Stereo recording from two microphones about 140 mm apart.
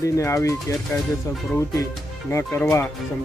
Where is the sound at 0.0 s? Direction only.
20° left (ahead or behind).